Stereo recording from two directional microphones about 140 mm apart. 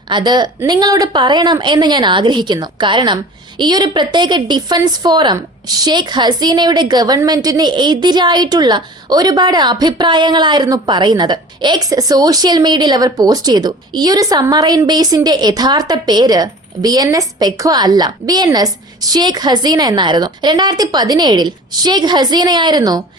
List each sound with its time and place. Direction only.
0.1 s a woman's voice: 30° right (ahead or behind)